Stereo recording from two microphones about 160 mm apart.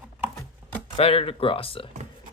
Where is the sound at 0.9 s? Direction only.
40° left (ahead or behind).